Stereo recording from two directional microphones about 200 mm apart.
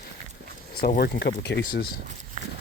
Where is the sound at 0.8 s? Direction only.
50° left (ahead or behind).